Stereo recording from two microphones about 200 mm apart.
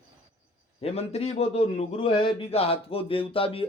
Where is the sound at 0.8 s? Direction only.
30° left (ahead or behind).